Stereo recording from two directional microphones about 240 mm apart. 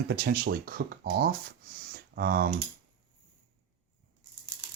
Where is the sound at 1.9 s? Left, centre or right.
Right.